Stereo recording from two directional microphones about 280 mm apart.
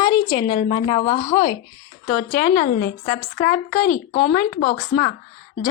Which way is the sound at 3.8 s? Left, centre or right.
Left.